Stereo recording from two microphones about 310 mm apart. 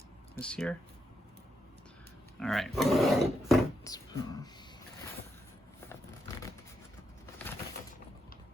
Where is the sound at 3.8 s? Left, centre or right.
Centre.